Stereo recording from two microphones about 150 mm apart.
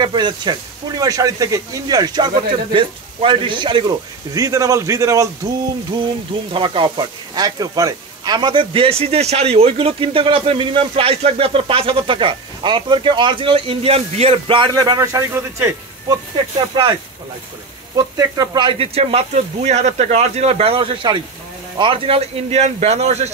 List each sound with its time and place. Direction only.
0.0 s speech: 30° right (ahead or behind)
6.5 s speech: 35° right (ahead or behind); by 16.2 s 20° right (ahead or behind)
16.5 s speech: 30° right (ahead or behind)
17.9 s a man's voice: 25° right (ahead or behind); by 23.3 s 45° right (ahead or behind)